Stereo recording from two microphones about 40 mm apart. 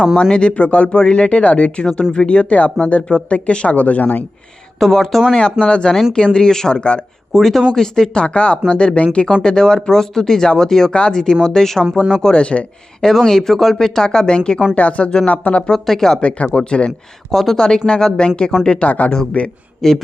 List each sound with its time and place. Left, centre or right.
0.2 s speech: left
3.7 s speech: left
4.8 s speech: centre
5.3 s speech: left
7.3 s speech: centre; by 9.1 s left
9.4 s speech: centre
13.0 s speech: centre
14.8 s speech: left
15.7 s speech: centre
16.2 s speech: left
17.3 s speech: centre
17.8 s speech: left
18.9 s speech: left
19.8 s speech: centre